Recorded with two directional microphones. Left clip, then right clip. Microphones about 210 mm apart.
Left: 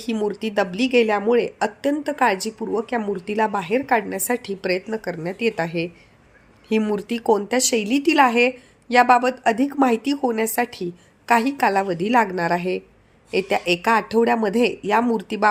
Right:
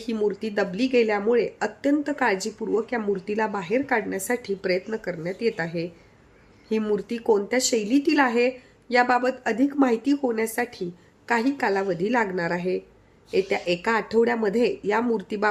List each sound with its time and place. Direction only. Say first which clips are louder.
0.0 s a woman's voice: left 1 dB; 15° left (ahead or behind)